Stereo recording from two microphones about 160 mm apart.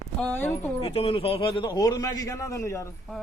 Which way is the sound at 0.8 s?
35° left (ahead or behind).